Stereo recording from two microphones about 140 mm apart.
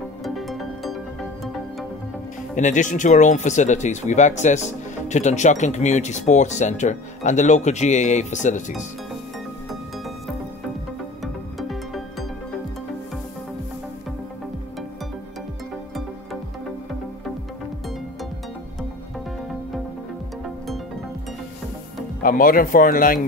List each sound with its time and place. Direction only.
0.2 s music: centre (ahead or behind)
2.5 s speech: 65° left (ahead or behind)
9.7 s music: centre (ahead or behind)
11.5 s music: centre (ahead or behind)
22.2 s speech: 85° left